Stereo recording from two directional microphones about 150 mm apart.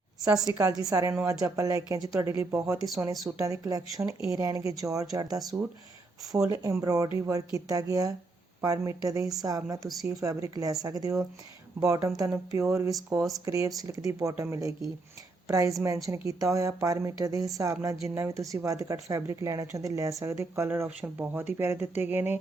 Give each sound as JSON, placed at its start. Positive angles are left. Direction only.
{"t": 0.4, "sound": "a woman's voice", "side_deg": -25}
{"t": 6.5, "sound": "a woman's voice", "side_deg": -20}
{"t": 20.8, "sound": "speech", "side_deg": -5}
{"t": 21.6, "sound": "speech", "side_deg": -15}